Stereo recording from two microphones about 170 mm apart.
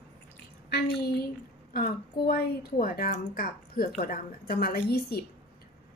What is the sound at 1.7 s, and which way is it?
A woman's voice, 60° left (ahead or behind).